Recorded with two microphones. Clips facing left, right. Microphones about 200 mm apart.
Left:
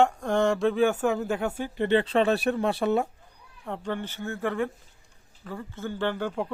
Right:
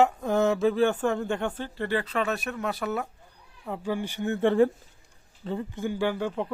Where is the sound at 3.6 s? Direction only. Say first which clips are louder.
Right 2 dB; 5° right (ahead or behind).